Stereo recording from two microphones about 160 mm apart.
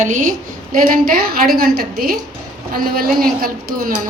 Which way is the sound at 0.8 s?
65° right (ahead or behind).